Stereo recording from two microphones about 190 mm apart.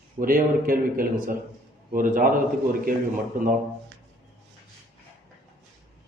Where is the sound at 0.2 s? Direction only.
50° right (ahead or behind).